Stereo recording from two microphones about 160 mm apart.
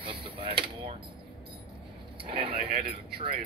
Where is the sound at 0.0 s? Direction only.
35° right (ahead or behind).